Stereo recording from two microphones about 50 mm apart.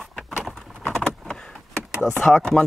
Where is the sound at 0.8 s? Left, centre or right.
Centre.